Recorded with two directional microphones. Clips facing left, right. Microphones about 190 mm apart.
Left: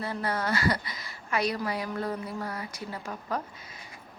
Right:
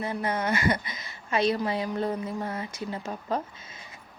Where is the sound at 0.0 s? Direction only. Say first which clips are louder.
Right 2 dB; 20° right (ahead or behind).